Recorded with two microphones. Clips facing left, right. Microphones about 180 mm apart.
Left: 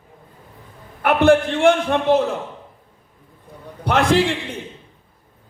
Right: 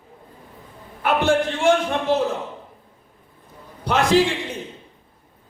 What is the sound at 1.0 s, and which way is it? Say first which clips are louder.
Speech: left 5 dB; 60° left (ahead or behind).